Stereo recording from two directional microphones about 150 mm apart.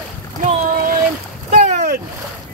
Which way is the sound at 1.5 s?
50° right (ahead or behind).